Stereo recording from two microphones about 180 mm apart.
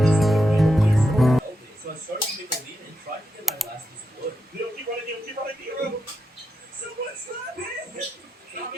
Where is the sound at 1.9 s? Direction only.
55° right (ahead or behind).